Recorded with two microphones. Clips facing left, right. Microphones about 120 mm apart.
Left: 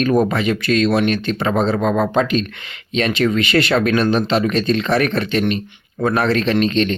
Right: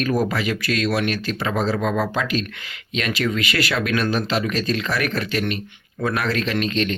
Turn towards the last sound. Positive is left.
turn(degrees=30)  # may be behind; listen again after turning